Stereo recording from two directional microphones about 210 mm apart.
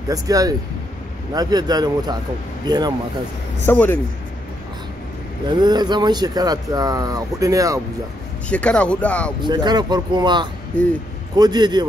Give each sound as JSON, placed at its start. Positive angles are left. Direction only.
{"t": 0.1, "sound": "speech", "side_deg": -15}
{"t": 3.6, "sound": "speech", "side_deg": 10}
{"t": 5.5, "sound": "speech", "side_deg": -20}
{"t": 8.5, "sound": "speech", "side_deg": 5}
{"t": 9.4, "sound": "speech", "side_deg": -20}